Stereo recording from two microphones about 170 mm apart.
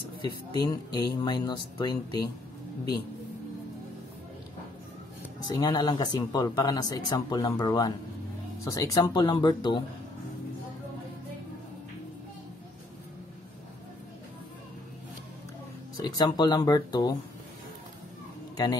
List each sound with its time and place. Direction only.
0.2 s speech: 25° left (ahead or behind)
5.5 s speech: 20° left (ahead or behind)
16.0 s speech: 25° left (ahead or behind)